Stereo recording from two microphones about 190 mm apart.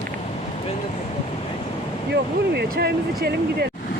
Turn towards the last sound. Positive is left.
turn(degrees=-60)  # may be behind; listen again after turning